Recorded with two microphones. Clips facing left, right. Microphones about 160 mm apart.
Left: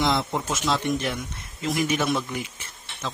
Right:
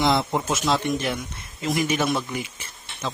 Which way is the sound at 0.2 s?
20° right (ahead or behind).